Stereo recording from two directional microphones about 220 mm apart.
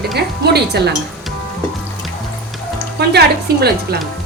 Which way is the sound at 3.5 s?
45° right (ahead or behind).